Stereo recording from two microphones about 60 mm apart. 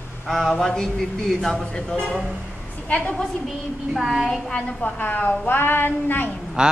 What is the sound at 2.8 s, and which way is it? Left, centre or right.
Speech, left.